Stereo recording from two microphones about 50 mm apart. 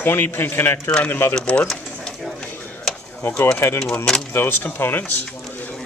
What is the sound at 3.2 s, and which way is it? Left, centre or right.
Speech, left.